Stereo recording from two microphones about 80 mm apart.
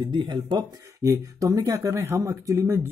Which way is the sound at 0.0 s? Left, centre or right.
Right.